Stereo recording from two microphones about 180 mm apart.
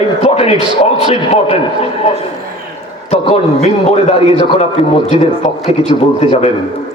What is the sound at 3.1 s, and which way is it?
A man's voice, 35° left (ahead or behind).